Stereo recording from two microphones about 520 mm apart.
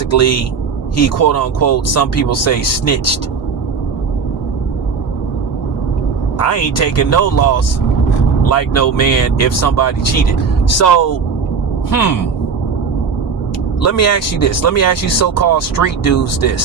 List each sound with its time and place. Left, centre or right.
0.1 s speech: left
6.4 s speech: left
13.8 s speech: left